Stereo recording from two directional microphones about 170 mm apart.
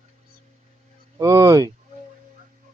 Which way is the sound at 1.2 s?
20° right (ahead or behind).